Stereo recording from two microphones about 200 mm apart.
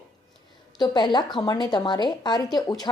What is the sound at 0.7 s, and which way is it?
A woman's voice, 20° left (ahead or behind).